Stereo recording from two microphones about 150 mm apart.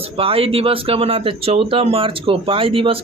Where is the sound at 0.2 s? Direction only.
40° right (ahead or behind).